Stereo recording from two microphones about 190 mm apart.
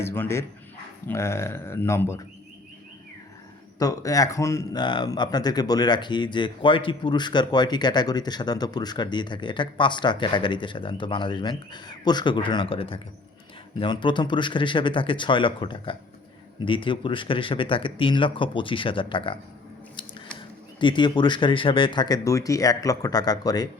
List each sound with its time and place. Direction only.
0.0 s speech: 10° left (ahead or behind)
3.8 s speech: 20° left (ahead or behind)
20.7 s speech: 25° left (ahead or behind)